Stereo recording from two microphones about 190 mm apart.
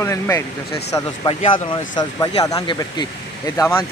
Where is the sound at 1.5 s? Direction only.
25° left (ahead or behind).